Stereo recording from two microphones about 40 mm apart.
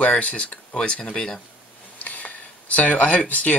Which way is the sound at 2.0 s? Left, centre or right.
Left.